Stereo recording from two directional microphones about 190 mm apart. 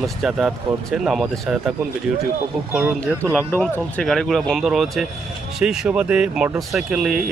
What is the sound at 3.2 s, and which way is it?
Speech, 10° right (ahead or behind).